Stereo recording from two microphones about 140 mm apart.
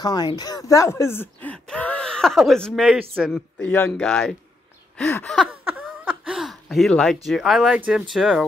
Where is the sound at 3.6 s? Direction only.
15° left (ahead or behind).